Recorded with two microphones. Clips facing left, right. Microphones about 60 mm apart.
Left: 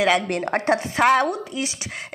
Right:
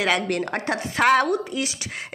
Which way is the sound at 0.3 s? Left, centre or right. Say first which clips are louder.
Left 4 dB; left.